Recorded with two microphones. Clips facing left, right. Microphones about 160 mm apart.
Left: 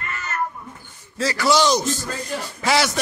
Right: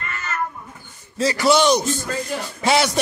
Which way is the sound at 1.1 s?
25° right (ahead or behind).